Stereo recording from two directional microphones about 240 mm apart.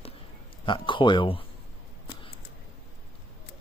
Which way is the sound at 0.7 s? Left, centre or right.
Left.